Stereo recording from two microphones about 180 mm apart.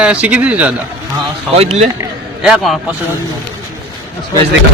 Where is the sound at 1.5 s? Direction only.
35° right (ahead or behind).